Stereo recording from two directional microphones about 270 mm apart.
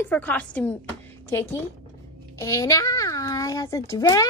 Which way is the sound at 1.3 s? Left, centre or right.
Centre.